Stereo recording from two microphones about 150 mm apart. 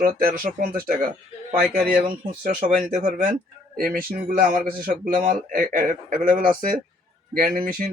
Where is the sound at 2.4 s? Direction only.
80° right.